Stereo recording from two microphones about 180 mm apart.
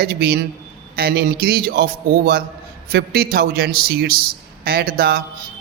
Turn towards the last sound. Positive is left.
turn(degrees=-55)  # may be behind; listen again after turning